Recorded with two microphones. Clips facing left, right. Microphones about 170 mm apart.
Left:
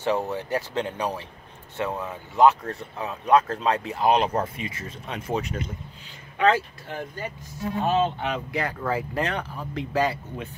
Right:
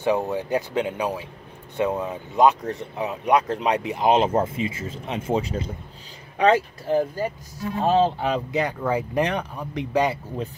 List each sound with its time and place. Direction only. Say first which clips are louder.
0.0 s speech: right 3 dB; 15° right (ahead or behind); by 5.7 s 30° right (ahead or behind)
6.9 s speech: right 12 dB; 35° right (ahead or behind)
8.5 s speech: right 3 dB; 20° right (ahead or behind)